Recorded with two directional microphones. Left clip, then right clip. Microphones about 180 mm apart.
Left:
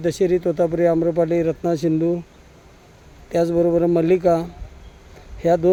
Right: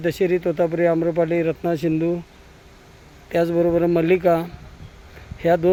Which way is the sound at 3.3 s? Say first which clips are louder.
Left 1 dB; 10° left (ahead or behind).